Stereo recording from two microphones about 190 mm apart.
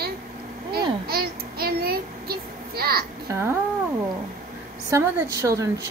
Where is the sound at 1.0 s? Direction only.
55° right (ahead or behind).